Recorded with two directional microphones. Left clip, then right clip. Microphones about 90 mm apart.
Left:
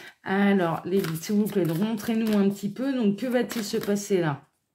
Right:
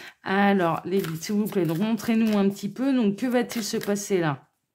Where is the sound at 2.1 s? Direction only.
50° right (ahead or behind).